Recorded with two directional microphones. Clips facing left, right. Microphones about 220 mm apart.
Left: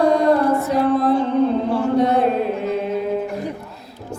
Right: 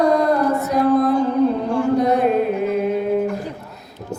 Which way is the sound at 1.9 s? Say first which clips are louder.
Left 1 dB; 30° left (ahead or behind).